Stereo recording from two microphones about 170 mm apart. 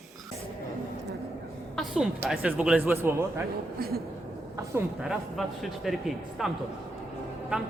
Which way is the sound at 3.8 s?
65° right (ahead or behind).